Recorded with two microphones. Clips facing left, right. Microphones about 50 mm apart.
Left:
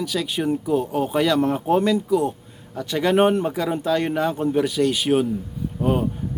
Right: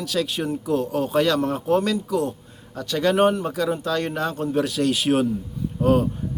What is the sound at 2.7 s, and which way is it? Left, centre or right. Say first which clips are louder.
Speech: left 1 dB; centre.